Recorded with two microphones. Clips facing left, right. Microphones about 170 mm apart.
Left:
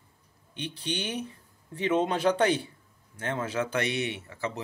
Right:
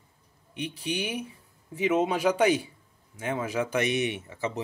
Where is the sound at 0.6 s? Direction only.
10° right (ahead or behind).